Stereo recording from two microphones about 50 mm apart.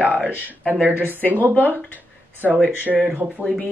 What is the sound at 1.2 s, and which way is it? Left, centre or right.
Speech, left.